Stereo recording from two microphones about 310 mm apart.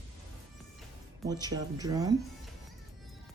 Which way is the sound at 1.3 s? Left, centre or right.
Centre.